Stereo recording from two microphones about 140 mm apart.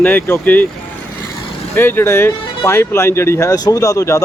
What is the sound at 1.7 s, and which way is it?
Speech, 15° left (ahead or behind).